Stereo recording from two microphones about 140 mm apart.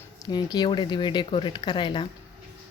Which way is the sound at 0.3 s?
30° left (ahead or behind).